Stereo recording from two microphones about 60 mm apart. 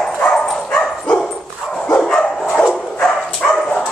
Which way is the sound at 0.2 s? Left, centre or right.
Centre.